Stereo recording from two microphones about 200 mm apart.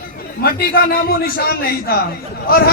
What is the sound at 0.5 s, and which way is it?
Speech, 50° left (ahead or behind).